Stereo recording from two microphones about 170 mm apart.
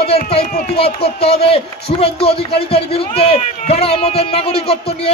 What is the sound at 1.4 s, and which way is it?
A man's voice, 35° left (ahead or behind).